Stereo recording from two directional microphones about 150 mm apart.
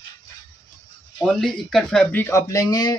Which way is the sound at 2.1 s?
15° left (ahead or behind).